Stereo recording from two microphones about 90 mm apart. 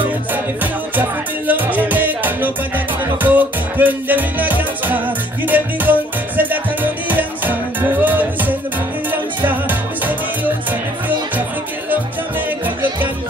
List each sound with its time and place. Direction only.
0.3 s music: 20° right (ahead or behind)